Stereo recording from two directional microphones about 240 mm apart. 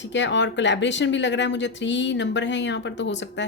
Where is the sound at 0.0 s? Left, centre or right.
Left.